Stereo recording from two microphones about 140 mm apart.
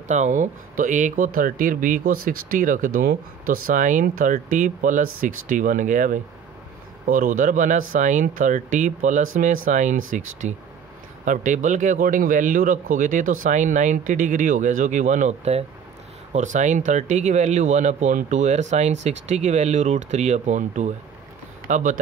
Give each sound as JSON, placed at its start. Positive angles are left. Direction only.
{"t": 0.1, "sound": "speech", "side_deg": -60}